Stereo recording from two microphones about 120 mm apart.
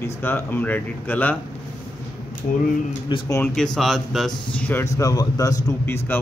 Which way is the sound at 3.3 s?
25° left (ahead or behind).